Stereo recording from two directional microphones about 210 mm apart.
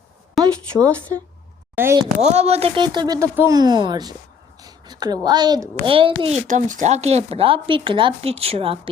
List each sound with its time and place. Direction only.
0.4 s a sound: centre (ahead or behind)
1.7 s speech: 10° right (ahead or behind)
2.2 s a woman's voice: 30° right (ahead or behind)